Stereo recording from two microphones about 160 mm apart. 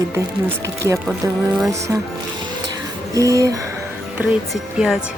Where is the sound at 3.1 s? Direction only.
20° right (ahead or behind).